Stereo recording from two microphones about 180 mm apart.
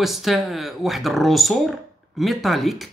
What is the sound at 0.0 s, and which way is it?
Speech, centre (ahead or behind).